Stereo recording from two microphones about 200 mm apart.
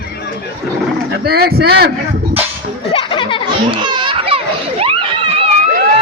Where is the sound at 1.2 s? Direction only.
50° right (ahead or behind).